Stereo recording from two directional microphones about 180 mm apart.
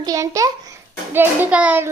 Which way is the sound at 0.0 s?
20° right (ahead or behind).